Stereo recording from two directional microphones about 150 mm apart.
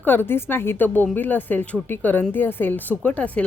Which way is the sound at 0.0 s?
15° left (ahead or behind).